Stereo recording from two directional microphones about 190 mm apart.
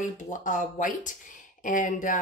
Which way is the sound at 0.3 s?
45° left (ahead or behind).